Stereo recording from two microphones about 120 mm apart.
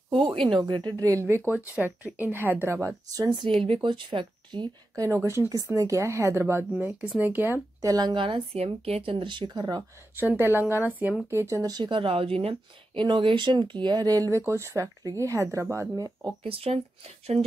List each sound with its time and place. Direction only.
0.1 s a sound: 50° right (ahead or behind)
0.5 s speech: 40° right (ahead or behind)
1.2 s speech: 20° right (ahead or behind)
3.2 s speech: 35° right (ahead or behind)
4.9 s speech: 25° right (ahead or behind)
7.8 s speech: 30° right (ahead or behind)
8.1 s speech: 45° right (ahead or behind)
9.1 s speech: 40° right (ahead or behind)
10.1 s speech: 15° right (ahead or behind)
16.4 s speech: 55° right (ahead or behind)